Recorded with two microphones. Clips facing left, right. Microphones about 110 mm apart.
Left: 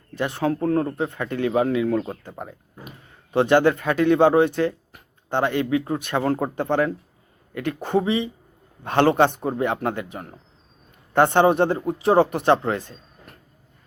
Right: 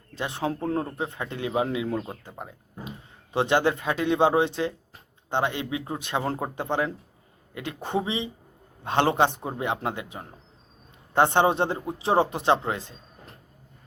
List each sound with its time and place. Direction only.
0.1 s speech: 20° right (ahead or behind)
3.3 s speech: 20° right (ahead or behind)
4.5 s a sound: 20° right (ahead or behind)
5.5 s speech: 20° right (ahead or behind)